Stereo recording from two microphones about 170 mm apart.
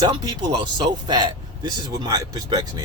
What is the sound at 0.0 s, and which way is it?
Speech, 25° right (ahead or behind).